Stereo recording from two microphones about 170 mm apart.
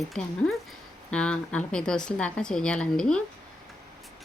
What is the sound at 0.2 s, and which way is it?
A woman's voice, 5° left (ahead or behind).